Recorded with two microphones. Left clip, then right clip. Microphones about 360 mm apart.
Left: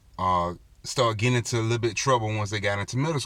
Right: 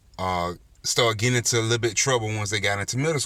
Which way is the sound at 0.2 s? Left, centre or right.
Centre.